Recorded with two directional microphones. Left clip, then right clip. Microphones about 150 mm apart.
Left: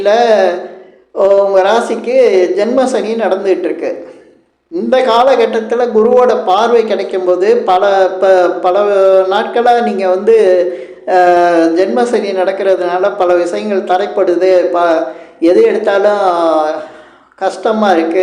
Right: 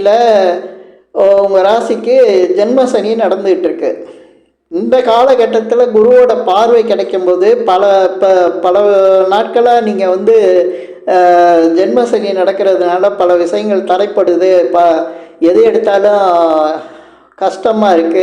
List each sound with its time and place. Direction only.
0.0 s speech: 30° right (ahead or behind)